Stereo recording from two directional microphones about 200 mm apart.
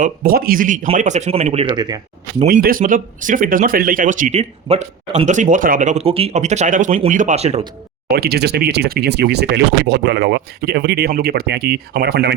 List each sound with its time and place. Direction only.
0.0 s speech: 45° right (ahead or behind); by 2.0 s 20° right (ahead or behind)
2.5 s speech: 45° right (ahead or behind)
8.1 s speech: 50° right (ahead or behind)